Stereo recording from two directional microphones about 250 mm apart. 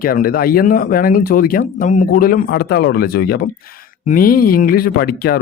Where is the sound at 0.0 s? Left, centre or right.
Left.